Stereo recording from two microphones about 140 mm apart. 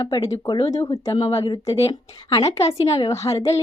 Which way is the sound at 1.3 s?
40° left (ahead or behind).